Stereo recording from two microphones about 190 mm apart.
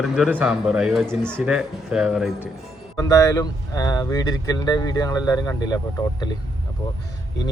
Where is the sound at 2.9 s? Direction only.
20° left (ahead or behind).